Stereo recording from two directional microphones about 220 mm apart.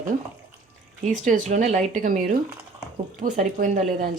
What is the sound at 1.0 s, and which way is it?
Speech, 35° right (ahead or behind).